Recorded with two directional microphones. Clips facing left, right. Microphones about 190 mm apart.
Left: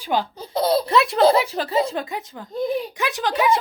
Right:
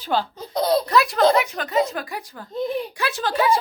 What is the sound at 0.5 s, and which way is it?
Speech, 5° left (ahead or behind).